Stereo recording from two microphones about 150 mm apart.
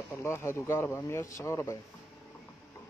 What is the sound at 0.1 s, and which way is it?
A man's voice, 15° left (ahead or behind).